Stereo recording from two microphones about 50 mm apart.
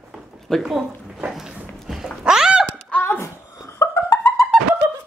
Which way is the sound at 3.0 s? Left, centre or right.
Left.